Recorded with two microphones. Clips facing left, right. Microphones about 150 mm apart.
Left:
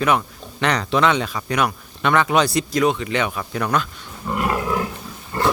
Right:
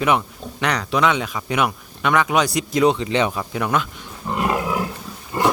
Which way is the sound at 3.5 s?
15° right (ahead or behind).